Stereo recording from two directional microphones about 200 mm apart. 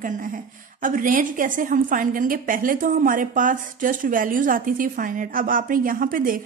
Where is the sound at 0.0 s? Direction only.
40° right (ahead or behind).